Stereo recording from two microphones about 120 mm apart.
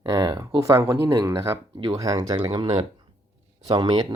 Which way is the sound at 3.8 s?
35° right (ahead or behind).